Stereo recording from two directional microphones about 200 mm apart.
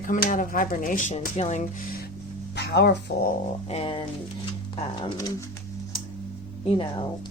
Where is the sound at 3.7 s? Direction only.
30° left (ahead or behind).